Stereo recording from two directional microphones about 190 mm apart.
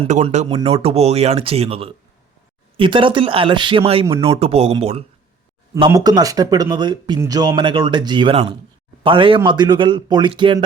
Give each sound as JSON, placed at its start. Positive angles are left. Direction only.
{"t": 0.0, "sound": "speech", "side_deg": -35}
{"t": 5.7, "sound": "speech", "side_deg": -20}